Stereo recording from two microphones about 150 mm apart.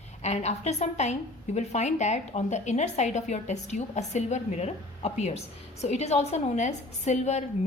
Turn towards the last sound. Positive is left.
turn(degrees=50)  # may be behind; listen again after turning